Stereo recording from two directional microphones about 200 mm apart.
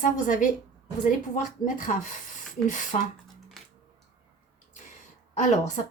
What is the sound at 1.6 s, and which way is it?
A woman's voice, 40° left (ahead or behind).